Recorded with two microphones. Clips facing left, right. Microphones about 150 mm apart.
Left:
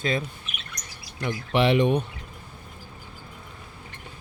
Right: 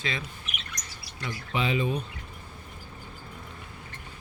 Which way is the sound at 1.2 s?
65° left (ahead or behind).